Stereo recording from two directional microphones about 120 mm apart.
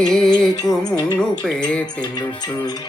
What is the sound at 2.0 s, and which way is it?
Music, 35° left (ahead or behind).